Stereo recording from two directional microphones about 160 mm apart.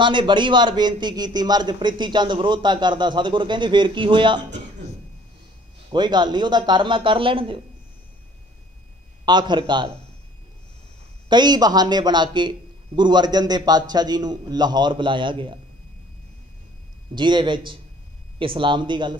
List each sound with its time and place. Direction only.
0.0 s a man's voice: 30° right (ahead or behind)
5.9 s a man's voice: 25° right (ahead or behind)
9.2 s a man's voice: 25° right (ahead or behind)
11.2 s a man's voice: 25° right (ahead or behind)
17.1 s a man's voice: 30° right (ahead or behind)